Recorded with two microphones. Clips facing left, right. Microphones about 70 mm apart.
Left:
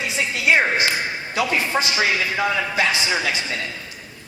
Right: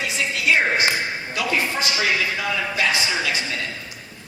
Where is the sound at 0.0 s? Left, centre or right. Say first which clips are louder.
Left 1 dB; left.